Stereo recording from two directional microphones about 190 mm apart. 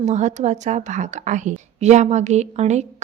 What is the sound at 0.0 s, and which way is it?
A woman's voice, 35° right (ahead or behind).